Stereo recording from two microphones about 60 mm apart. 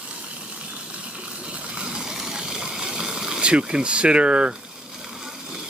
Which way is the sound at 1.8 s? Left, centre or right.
Centre.